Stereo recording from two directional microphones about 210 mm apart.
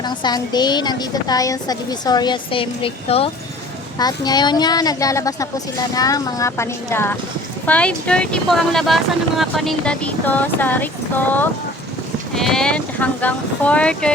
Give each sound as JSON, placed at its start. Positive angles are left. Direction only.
{"t": 0.0, "sound": "a woman's voice", "side_deg": 20}